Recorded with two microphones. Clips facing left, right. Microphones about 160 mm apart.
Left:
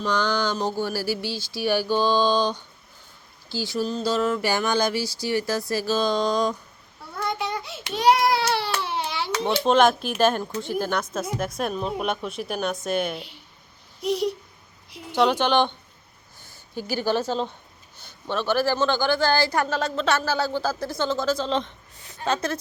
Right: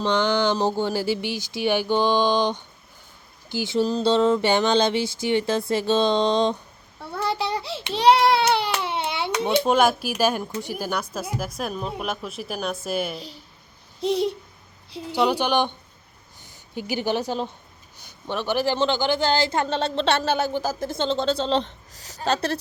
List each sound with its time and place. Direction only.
0.0 s a man's voice: 25° right (ahead or behind)
3.8 s a man's voice: 30° right (ahead or behind); by 13.2 s 5° right (ahead or behind)
14.0 s a man's voice: 25° right (ahead or behind)
15.1 s a woman's voice: 10° right (ahead or behind); by 21.8 s 35° right (ahead or behind)
21.9 s a woman's voice: 90° right
22.2 s speech: 35° right (ahead or behind)